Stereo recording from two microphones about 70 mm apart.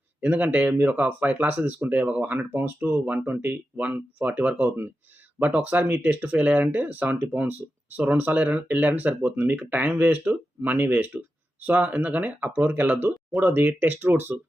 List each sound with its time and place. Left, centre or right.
0.2 s speech: right